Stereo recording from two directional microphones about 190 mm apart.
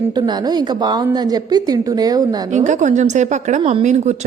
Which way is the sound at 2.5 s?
40° right (ahead or behind).